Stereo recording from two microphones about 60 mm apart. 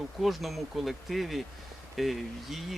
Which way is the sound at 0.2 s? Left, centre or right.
Centre.